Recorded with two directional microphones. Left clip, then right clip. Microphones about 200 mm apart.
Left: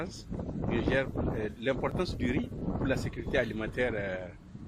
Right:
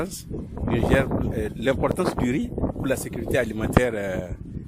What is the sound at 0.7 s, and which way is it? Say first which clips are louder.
Speech: right 8 dB; 55° right (ahead or behind).